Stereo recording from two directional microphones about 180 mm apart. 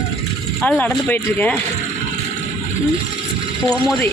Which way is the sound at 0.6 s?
10° left (ahead or behind).